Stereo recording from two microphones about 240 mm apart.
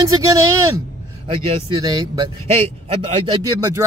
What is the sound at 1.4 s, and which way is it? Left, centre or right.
Speech, centre.